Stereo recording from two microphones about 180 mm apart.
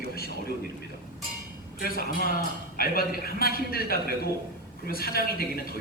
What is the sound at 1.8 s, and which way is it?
A man's voice, 55° left (ahead or behind).